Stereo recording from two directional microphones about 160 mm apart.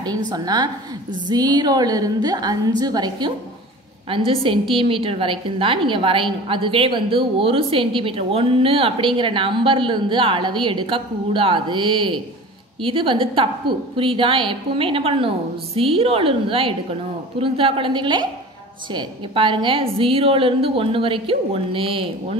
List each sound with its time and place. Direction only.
0.3 s a woman's voice: 25° right (ahead or behind)